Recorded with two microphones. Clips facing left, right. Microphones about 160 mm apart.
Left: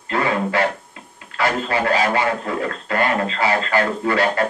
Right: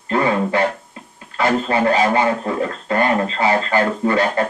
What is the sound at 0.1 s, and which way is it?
Music, 25° right (ahead or behind).